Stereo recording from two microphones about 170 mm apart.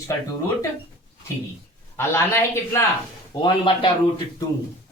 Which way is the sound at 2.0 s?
15° left (ahead or behind).